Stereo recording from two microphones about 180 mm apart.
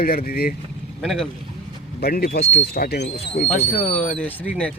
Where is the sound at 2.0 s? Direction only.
55° left (ahead or behind).